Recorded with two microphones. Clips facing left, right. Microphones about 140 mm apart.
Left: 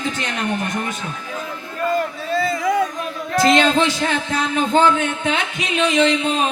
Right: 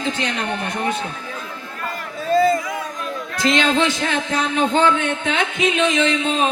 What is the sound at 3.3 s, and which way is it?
Speech, 40° left (ahead or behind).